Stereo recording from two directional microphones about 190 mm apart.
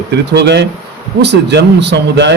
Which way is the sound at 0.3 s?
60° right (ahead or behind).